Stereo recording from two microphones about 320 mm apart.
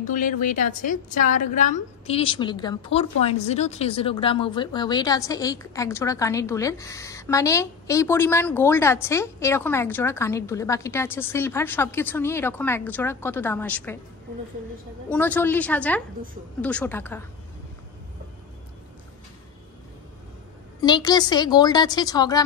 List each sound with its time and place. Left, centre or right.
0.0 s a woman's voice: left; by 13.9 s centre
15.0 s a woman's voice: centre
20.8 s a woman's voice: centre